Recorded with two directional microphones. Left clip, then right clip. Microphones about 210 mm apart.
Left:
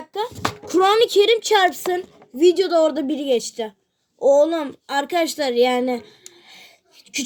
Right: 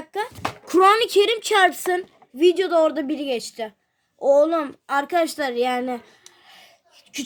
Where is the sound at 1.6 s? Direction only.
65° right (ahead or behind).